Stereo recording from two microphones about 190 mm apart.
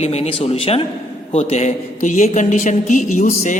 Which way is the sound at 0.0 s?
30° left (ahead or behind).